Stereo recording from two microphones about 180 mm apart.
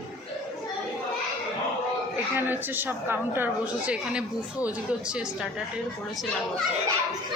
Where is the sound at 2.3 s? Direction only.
10° right (ahead or behind).